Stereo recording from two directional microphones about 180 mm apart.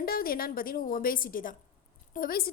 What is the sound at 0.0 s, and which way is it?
A woman's voice, 55° left (ahead or behind).